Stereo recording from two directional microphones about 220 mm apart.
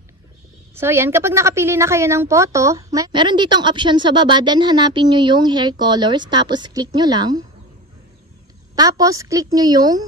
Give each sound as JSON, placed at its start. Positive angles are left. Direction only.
{"t": 0.7, "sound": "a woman's voice", "side_deg": -10}
{"t": 8.7, "sound": "a woman's voice", "side_deg": -15}